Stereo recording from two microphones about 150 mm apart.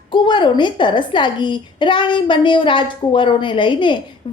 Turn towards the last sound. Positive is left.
turn(degrees=30)  # may be behind; listen again after turning